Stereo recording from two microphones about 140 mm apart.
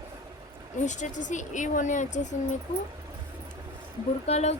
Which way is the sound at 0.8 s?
60° left (ahead or behind).